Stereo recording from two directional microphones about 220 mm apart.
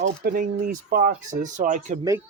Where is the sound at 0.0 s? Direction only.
40° right (ahead or behind).